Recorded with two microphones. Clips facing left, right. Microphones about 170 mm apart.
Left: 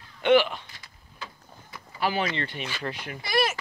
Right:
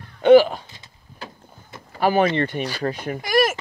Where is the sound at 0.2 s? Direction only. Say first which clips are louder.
Right 8 dB; 40° right (ahead or behind).